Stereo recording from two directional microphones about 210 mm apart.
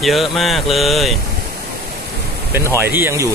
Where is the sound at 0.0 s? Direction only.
Centre (ahead or behind).